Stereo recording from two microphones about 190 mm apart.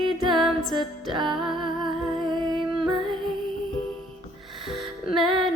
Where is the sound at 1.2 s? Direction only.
Centre (ahead or behind).